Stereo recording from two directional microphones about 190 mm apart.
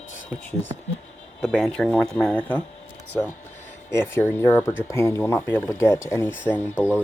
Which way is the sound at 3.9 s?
10° left (ahead or behind).